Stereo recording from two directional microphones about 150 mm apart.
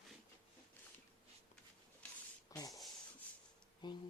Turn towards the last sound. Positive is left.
turn(degrees=30)  # may be behind; listen again after turning